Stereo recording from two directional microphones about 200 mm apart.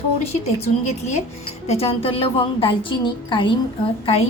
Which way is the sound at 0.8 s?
35° left (ahead or behind).